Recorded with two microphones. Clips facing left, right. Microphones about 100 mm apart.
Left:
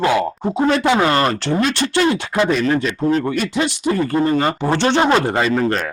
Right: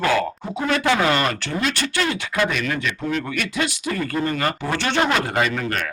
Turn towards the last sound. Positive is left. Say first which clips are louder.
# left 5 dB
turn(degrees=30)  # may be behind; listen again after turning